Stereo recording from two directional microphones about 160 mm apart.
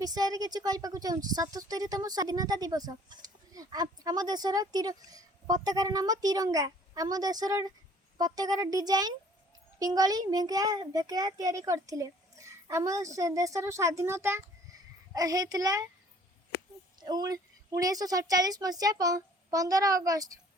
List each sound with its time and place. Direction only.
0.0 s speech: 25° right (ahead or behind)
17.0 s speech: 25° right (ahead or behind)